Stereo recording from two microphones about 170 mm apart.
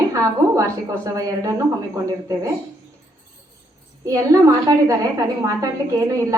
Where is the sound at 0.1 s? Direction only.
20° right (ahead or behind).